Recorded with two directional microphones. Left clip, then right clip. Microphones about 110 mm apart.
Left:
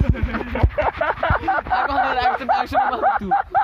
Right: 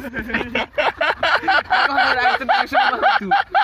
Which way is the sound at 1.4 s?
40° right (ahead or behind).